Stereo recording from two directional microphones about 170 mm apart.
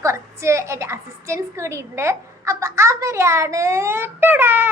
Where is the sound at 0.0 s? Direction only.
15° right (ahead or behind).